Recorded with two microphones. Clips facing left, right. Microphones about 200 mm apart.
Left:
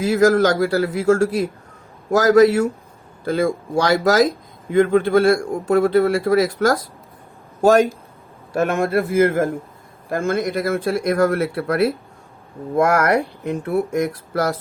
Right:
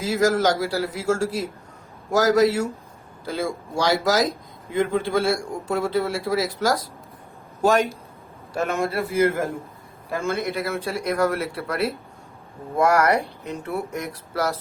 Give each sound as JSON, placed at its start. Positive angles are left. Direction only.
{"t": 0.1, "sound": "speech", "side_deg": 55}